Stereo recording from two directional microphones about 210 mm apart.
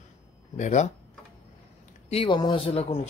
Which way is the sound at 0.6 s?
35° left (ahead or behind).